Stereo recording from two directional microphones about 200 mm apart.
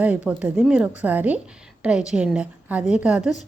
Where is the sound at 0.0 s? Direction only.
5° right (ahead or behind).